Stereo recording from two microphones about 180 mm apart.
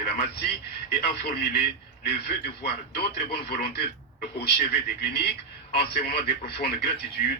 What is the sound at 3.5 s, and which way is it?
Speech, 55° left (ahead or behind).